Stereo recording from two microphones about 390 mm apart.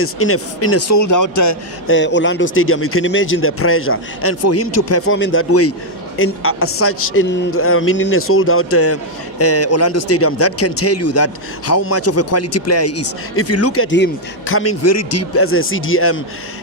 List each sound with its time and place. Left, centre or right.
0.0 s a man's voice: left
1.9 s a man's voice: left